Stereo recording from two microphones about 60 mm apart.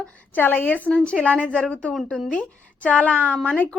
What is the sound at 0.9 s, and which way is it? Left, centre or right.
A woman's voice, centre.